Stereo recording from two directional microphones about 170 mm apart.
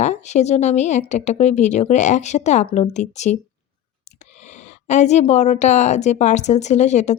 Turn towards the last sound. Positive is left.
turn(degrees=40)  # may be behind; listen again after turning